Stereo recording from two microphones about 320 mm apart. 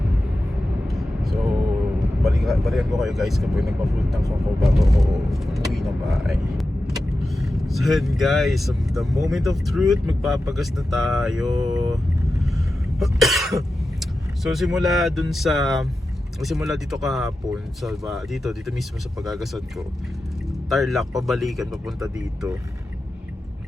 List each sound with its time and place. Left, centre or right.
0.9 s vehicle: centre
2.2 s speech: centre
12.4 s cough: centre
16.4 s speech: centre